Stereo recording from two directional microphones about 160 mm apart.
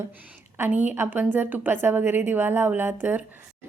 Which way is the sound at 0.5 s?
10° right (ahead or behind).